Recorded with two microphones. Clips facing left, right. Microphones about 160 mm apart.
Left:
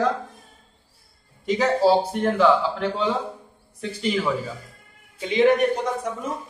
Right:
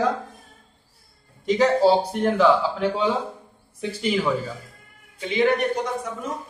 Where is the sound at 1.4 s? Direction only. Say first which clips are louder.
Right 1 dB; 5° left (ahead or behind).